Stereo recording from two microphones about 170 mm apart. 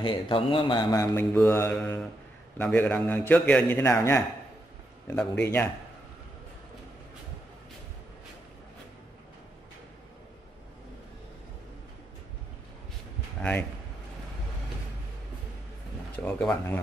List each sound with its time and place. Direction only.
0.0 s a man's voice: 30° left (ahead or behind); by 5.7 s 15° left (ahead or behind)
13.4 s speech: 10° left (ahead or behind)
16.2 s a man's voice: 5° left (ahead or behind)